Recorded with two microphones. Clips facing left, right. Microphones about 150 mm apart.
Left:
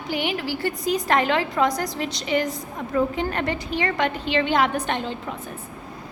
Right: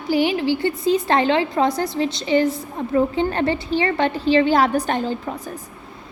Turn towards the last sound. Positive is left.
turn(degrees=-40)  # may be behind; listen again after turning